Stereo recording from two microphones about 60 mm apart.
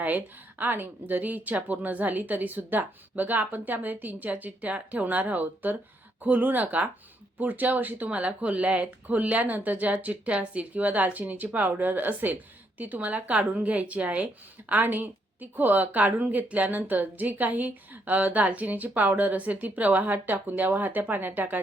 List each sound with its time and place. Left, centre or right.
0.0 s speech: right
14.7 s speech: right